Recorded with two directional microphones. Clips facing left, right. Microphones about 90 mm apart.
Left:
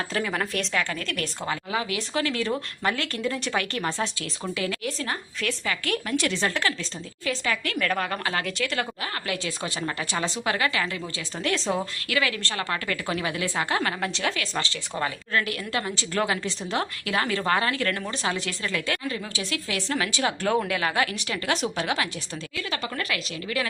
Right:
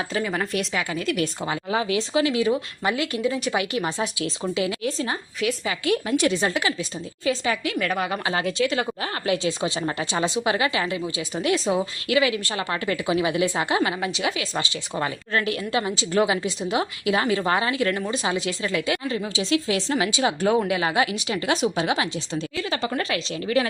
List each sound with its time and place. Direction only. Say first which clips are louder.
0.1 s a woman's voice: right 2 dB; centre (ahead or behind); by 23.6 s 30° right (ahead or behind)